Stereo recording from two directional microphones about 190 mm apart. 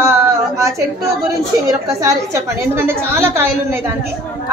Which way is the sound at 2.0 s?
15° right (ahead or behind).